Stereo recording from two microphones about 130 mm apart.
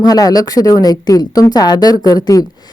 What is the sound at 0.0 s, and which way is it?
A woman's voice, 30° left (ahead or behind).